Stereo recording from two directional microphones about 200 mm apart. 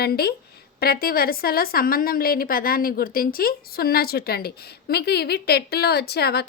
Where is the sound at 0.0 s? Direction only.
50° left (ahead or behind).